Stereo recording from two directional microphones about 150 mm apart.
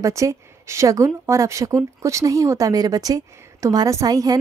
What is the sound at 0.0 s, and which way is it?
A woman's voice, 20° right (ahead or behind).